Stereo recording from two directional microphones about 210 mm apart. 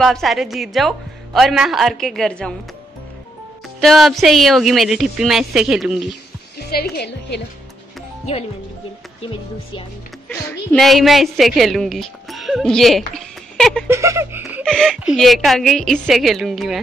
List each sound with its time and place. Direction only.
0.0 s a woman's voice: centre (ahead or behind)
3.8 s a woman's voice: centre (ahead or behind)
6.6 s a woman's voice: 50° left (ahead or behind)
10.7 s a woman's voice: centre (ahead or behind)
13.8 s laughter: 15° right (ahead or behind)
14.8 s a woman's voice: centre (ahead or behind)